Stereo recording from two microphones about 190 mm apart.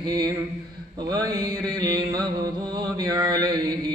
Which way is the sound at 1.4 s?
5° left (ahead or behind).